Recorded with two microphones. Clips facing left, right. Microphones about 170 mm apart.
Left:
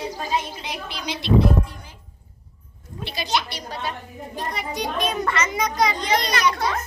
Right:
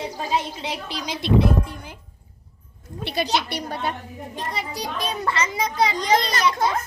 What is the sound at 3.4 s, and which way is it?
Speech, 55° right (ahead or behind).